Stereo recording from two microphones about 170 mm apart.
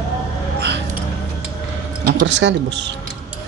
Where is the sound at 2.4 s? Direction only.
90° right.